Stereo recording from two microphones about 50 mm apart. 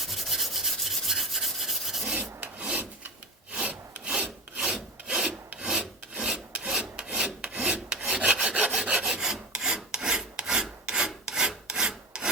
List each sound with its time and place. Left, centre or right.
0.0 s rub: centre
3.5 s wood: right
5.5 s rub: centre